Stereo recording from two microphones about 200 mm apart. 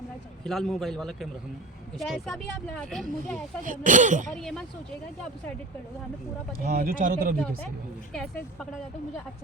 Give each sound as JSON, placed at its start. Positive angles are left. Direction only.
{"t": 0.4, "sound": "a man's voice", "side_deg": 0}
{"t": 3.6, "sound": "speech", "side_deg": -40}
{"t": 4.3, "sound": "a man's voice", "side_deg": 5}
{"t": 6.6, "sound": "speech", "side_deg": -45}
{"t": 8.1, "sound": "a man's voice", "side_deg": 0}